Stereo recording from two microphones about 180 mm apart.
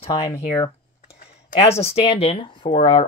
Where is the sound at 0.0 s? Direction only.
30° left (ahead or behind).